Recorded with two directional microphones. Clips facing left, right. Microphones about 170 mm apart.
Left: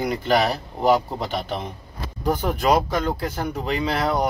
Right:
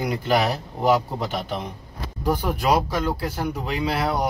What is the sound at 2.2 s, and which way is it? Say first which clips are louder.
Speech: left 1 dB; 5° right (ahead or behind).